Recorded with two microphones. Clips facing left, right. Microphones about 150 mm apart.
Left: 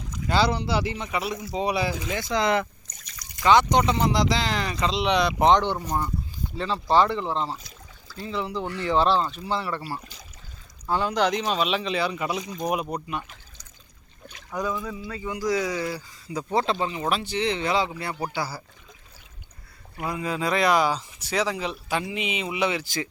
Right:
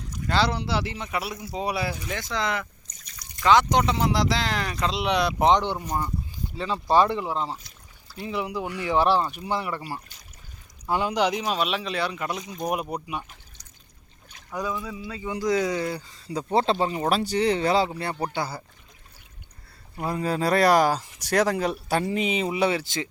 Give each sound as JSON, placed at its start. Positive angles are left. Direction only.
{"t": 0.3, "sound": "speech", "side_deg": 0}
{"t": 1.9, "sound": "speech", "side_deg": 90}
{"t": 2.1, "sound": "speech", "side_deg": 15}
{"t": 3.4, "sound": "speech", "side_deg": 0}
{"t": 11.4, "sound": "speech", "side_deg": 0}
{"t": 12.6, "sound": "speech", "side_deg": -5}
{"t": 14.5, "sound": "speech", "side_deg": -10}
{"t": 20.1, "sound": "speech", "side_deg": -40}